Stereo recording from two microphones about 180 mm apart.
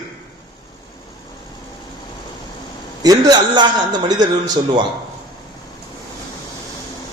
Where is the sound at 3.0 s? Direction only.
20° right (ahead or behind).